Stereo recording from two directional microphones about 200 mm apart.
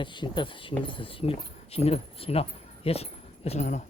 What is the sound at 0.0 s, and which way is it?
Speech, 25° left (ahead or behind).